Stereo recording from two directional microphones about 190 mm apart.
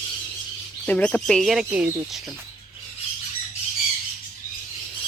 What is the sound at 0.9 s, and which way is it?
Speech, 5° left (ahead or behind).